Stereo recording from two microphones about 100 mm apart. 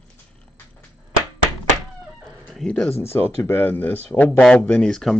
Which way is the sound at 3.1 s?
20° left (ahead or behind).